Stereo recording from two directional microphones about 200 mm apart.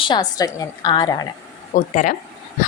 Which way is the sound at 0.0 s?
20° left (ahead or behind).